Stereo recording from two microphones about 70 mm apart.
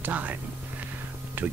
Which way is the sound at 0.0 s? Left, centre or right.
Right.